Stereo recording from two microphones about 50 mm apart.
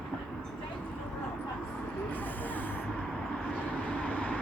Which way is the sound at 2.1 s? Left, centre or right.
Left.